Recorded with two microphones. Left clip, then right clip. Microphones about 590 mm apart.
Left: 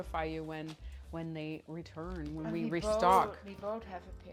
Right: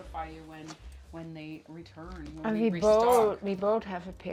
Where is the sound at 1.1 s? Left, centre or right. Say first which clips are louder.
Left 1 dB; left.